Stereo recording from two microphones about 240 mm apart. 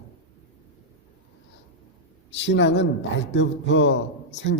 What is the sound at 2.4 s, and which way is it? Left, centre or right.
A man's voice, left.